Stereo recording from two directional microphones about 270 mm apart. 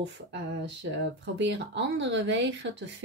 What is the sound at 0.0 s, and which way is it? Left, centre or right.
Speech, right.